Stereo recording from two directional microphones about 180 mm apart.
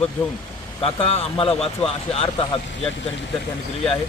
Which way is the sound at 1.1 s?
30° left (ahead or behind).